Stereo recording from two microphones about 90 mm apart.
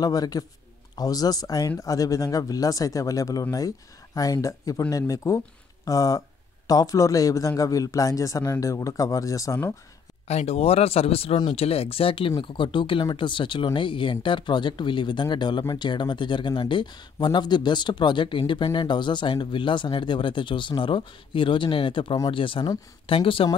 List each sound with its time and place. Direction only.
0.0 s speech: 45° left (ahead or behind)
10.6 s speech: 90° left; by 22.7 s 75° left (ahead or behind)
23.0 s speech: 85° left